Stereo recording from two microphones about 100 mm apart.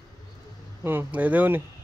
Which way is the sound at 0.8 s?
20° right (ahead or behind).